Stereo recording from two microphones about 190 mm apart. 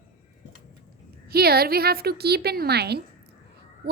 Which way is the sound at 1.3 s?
55° right (ahead or behind).